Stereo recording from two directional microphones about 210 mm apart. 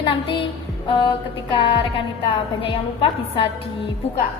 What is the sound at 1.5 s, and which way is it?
A woman's voice, 25° left (ahead or behind).